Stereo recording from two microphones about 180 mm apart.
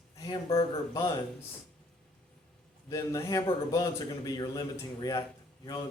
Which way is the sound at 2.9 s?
20° left (ahead or behind).